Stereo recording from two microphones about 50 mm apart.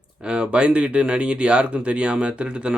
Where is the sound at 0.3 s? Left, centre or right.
Centre.